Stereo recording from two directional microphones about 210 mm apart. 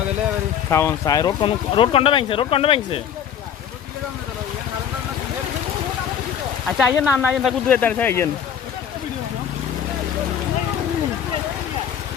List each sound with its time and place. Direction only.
0.7 s speech: 15° left (ahead or behind)
6.7 s speech: 5° right (ahead or behind)
7.7 s speech: 10° left (ahead or behind)